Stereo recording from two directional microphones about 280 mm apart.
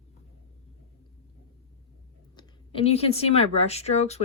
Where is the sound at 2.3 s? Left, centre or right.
Centre.